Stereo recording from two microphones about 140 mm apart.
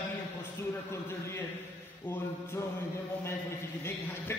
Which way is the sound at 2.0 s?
15° left (ahead or behind).